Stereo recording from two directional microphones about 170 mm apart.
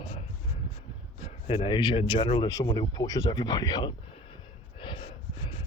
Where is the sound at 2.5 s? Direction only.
20° left (ahead or behind).